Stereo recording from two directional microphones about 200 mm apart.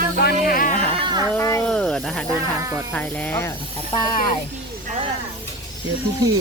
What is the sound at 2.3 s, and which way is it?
Speech, 15° right (ahead or behind).